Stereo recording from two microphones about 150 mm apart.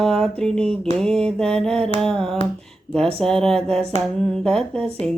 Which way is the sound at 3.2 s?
5° left (ahead or behind).